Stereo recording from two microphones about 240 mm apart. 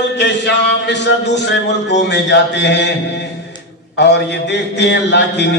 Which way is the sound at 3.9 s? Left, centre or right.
Left.